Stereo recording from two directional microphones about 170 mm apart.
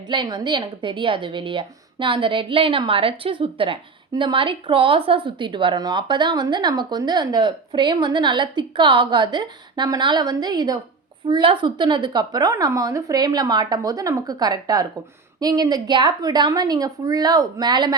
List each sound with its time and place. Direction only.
0.1 s a woman's voice: 25° right (ahead or behind)